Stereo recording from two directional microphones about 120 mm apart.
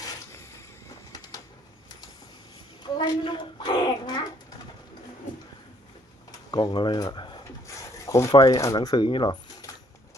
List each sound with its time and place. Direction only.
0.0 s vehicle: 25° left (ahead or behind)
2.8 s a child's voice: 35° left (ahead or behind)
6.5 s speech: 40° left (ahead or behind)
8.0 s speech: 25° left (ahead or behind)